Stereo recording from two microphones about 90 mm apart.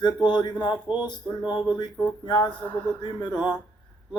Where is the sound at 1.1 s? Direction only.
55° left (ahead or behind).